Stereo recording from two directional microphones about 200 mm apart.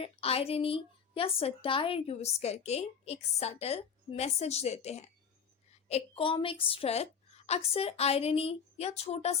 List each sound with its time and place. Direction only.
0.0 s a woman's voice: 30° left (ahead or behind)